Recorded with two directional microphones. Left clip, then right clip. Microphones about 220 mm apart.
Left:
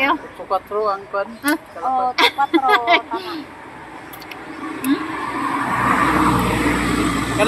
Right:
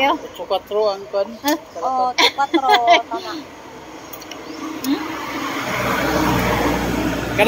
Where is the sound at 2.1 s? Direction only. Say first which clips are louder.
Even; 5° left (ahead or behind).